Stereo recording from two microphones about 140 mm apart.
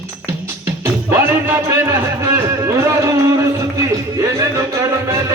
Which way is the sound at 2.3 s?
20° right (ahead or behind).